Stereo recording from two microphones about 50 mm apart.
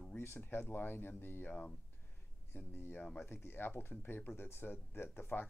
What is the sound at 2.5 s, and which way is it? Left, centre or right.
Speech, left.